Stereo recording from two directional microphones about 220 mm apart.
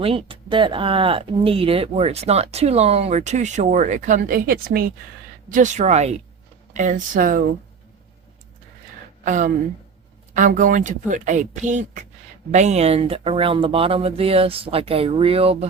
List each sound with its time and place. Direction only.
0.0 s speech: 25° right (ahead or behind)
9.2 s speech: 35° right (ahead or behind)